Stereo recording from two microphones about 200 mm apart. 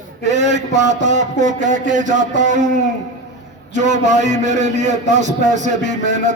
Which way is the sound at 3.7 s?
35° right (ahead or behind).